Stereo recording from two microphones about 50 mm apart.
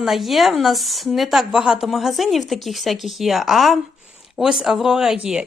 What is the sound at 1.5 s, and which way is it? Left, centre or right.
Speech, centre.